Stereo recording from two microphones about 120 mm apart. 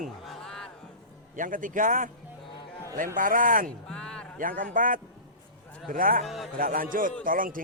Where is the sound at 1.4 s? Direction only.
90° right.